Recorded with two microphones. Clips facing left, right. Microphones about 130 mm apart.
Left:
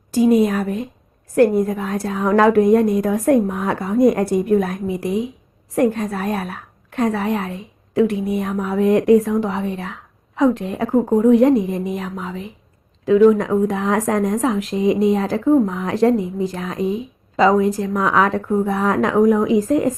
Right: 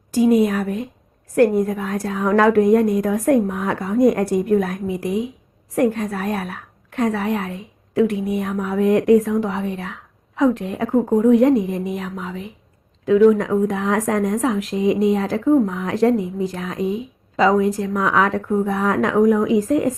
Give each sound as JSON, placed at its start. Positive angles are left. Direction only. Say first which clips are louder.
{"t": 0.1, "sound": "a woman's voice", "louder": "left 1 dB", "side_deg": 30}